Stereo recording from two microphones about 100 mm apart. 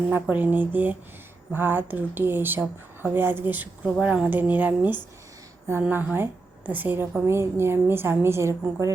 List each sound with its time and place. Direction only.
0.1 s a woman's voice: 15° right (ahead or behind)